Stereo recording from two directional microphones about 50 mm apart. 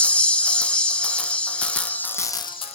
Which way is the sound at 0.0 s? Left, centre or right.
Left.